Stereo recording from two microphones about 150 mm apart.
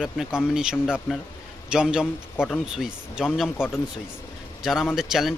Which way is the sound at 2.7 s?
5° right (ahead or behind).